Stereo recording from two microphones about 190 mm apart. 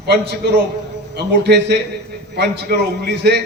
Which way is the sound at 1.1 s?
60° right (ahead or behind).